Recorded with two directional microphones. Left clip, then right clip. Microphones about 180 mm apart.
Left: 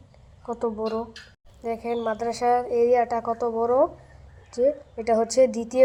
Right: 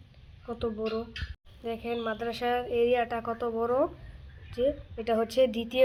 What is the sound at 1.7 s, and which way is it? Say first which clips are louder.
Speech: left 6 dB; 10° right (ahead or behind).